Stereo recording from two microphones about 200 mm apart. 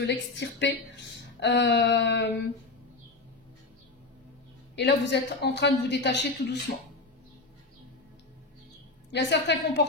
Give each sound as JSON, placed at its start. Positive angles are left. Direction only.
{"t": 0.0, "sound": "a woman's voice", "side_deg": 60}
{"t": 4.7, "sound": "a woman's voice", "side_deg": 60}
{"t": 9.1, "sound": "a woman's voice", "side_deg": 60}